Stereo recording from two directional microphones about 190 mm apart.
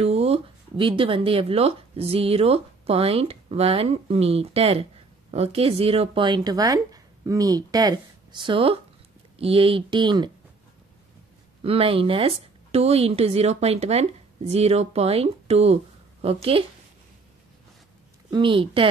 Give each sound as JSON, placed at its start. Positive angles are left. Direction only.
{"t": 0.0, "sound": "speech", "side_deg": -35}
{"t": 11.6, "sound": "speech", "side_deg": -30}
{"t": 18.3, "sound": "speech", "side_deg": -25}